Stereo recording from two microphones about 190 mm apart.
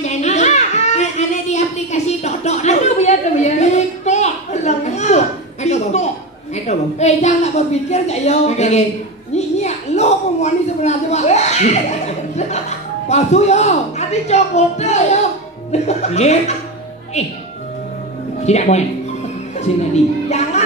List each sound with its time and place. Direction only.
0.0 s a sound: 35° left (ahead or behind)
6.5 s a woman's voice: 35° left (ahead or behind)
9.3 s a sound: 35° left (ahead or behind)
12.4 s a man's voice: 35° left (ahead or behind)
15.7 s chuckle: 35° left (ahead or behind)
18.4 s a woman's voice: 35° left (ahead or behind)
19.6 s music: 35° left (ahead or behind)